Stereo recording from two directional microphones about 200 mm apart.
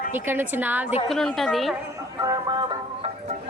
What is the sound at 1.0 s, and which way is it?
Speech, centre (ahead or behind).